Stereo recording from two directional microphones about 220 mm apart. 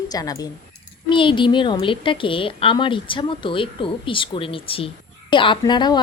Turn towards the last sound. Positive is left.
turn(degrees=20)  # may be behind; listen again after turning